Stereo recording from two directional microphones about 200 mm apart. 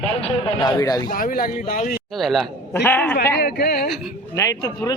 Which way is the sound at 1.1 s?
45° left (ahead or behind).